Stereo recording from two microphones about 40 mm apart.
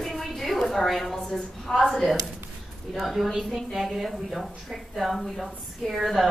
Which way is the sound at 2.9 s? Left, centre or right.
Centre.